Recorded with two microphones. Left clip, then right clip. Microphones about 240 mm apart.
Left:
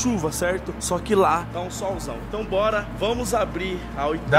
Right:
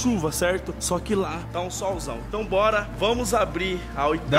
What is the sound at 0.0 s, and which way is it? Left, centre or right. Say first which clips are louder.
Speech: even; centre.